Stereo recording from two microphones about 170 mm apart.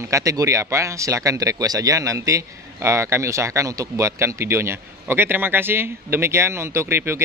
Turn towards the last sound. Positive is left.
turn(degrees=-15)  # may be behind; listen again after turning